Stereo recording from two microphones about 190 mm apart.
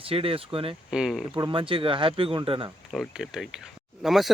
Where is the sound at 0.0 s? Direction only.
30° right (ahead or behind).